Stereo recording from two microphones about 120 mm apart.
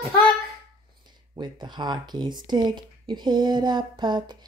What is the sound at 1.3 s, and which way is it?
Speech, 40° right (ahead or behind).